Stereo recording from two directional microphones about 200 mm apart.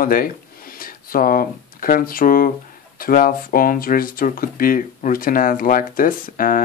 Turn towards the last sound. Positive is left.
turn(degrees=45)  # may be behind; listen again after turning